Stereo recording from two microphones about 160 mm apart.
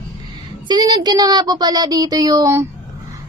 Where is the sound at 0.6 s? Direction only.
25° right (ahead or behind).